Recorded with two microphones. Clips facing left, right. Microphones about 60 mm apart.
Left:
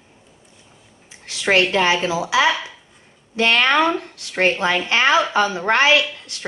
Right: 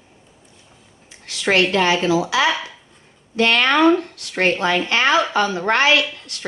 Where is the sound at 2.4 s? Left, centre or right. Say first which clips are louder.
Left 1 dB; centre.